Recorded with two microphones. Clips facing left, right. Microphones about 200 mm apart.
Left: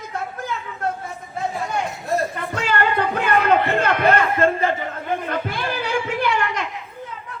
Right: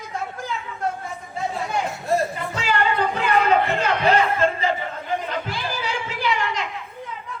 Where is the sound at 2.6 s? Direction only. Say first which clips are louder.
Left 1 dB; 55° left (ahead or behind).